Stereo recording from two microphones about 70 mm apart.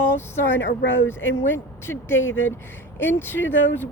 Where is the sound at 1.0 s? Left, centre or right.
Left.